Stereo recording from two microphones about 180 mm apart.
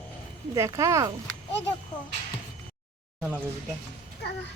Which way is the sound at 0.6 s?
15° right (ahead or behind).